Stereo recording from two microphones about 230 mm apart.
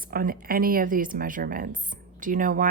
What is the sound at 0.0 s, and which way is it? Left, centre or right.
A woman's voice, right.